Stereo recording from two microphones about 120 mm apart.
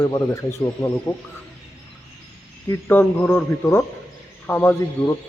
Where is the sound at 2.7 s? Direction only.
15° left (ahead or behind).